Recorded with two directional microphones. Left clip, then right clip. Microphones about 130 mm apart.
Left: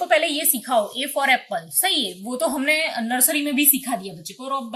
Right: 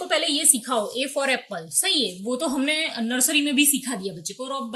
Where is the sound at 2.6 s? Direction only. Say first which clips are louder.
Left 3 dB; 10° right (ahead or behind).